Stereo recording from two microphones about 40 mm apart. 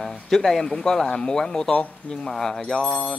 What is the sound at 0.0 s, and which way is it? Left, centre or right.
Speech, centre.